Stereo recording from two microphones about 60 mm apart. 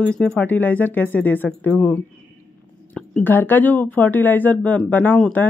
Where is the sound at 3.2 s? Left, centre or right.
Left.